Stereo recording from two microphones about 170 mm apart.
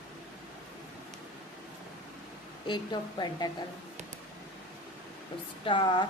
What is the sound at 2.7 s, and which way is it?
Speech, 25° left (ahead or behind).